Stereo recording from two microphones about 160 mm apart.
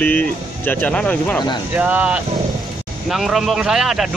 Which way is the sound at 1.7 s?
10° right (ahead or behind).